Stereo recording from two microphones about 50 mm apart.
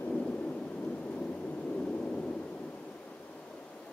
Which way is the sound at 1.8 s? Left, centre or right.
Left.